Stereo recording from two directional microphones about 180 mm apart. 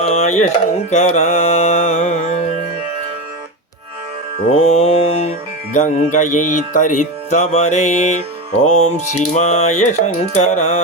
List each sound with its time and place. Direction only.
0.0 s music: 35° left (ahead or behind)
4.5 s music: 35° left (ahead or behind)